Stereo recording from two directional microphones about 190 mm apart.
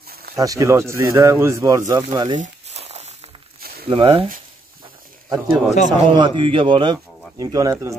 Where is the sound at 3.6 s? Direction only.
55° right (ahead or behind).